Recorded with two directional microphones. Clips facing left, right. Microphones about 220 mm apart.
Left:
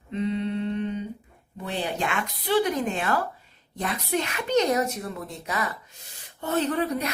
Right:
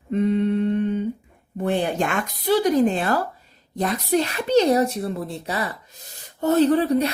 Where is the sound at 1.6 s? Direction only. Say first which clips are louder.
Right 7 dB; 50° right (ahead or behind).